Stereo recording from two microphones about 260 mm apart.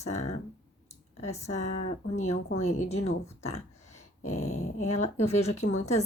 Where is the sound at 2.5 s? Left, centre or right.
Left.